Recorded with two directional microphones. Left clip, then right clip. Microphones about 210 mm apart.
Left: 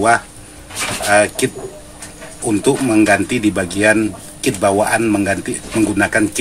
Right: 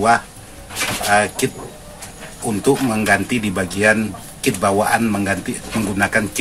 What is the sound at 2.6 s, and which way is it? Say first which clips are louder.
Speech: left 3 dB; 35° left (ahead or behind).